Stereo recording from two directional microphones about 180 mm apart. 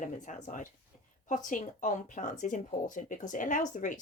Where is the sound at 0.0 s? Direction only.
45° left (ahead or behind).